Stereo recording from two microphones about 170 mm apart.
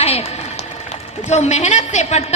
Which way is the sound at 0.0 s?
35° left (ahead or behind).